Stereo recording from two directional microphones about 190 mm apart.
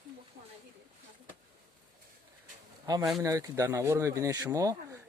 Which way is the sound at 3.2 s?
15° right (ahead or behind).